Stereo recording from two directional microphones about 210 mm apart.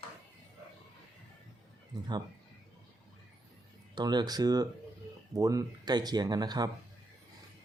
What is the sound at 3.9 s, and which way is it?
Speech, 20° right (ahead or behind).